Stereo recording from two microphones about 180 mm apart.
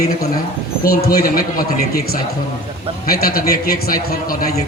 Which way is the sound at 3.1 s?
55° left (ahead or behind).